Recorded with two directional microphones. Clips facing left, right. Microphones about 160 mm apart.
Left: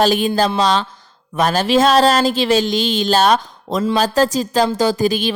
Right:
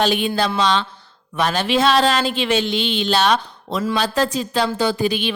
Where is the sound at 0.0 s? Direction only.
40° left (ahead or behind).